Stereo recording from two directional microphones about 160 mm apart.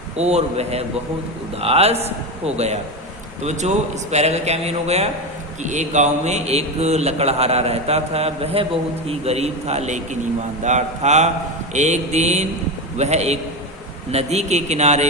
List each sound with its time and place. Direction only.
0.2 s a man's voice: 45° right (ahead or behind)